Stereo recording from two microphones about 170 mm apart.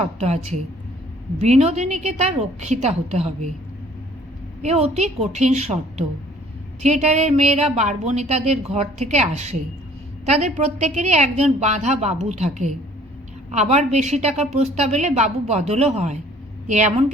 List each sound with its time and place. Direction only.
0.0 s speech: 40° right (ahead or behind)
4.6 s a woman's voice: 40° right (ahead or behind)